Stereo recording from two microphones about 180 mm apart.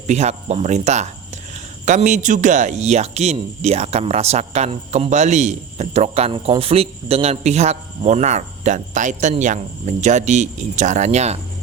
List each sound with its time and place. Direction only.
0.1 s speech: 40° right (ahead or behind)